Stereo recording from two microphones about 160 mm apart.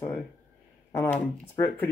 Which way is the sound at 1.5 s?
15° left (ahead or behind).